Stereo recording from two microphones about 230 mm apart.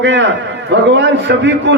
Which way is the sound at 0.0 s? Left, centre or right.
Right.